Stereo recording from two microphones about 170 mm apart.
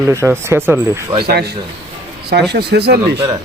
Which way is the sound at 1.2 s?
70° right (ahead or behind).